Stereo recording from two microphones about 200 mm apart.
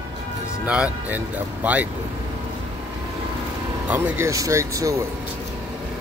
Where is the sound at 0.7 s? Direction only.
5° right (ahead or behind).